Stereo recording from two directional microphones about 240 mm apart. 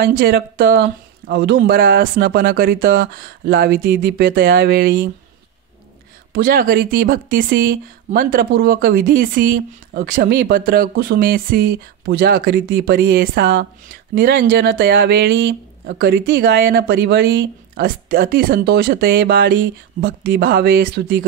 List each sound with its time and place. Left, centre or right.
0.0 s speech: right
6.3 s speech: right